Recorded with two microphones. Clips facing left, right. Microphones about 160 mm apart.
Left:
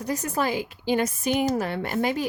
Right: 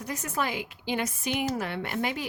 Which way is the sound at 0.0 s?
35° left (ahead or behind).